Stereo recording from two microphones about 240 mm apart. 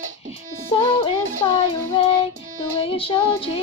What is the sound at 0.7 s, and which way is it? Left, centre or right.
Music, left.